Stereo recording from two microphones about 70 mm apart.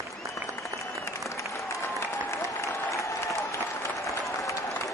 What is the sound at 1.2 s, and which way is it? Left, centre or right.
Applause, left.